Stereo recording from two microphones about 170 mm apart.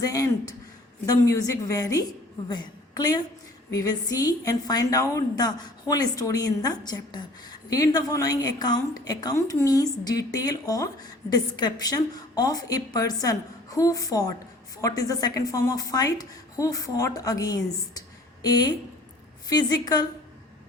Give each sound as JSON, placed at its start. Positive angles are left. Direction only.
{"t": 0.0, "sound": "a woman's voice", "side_deg": 20}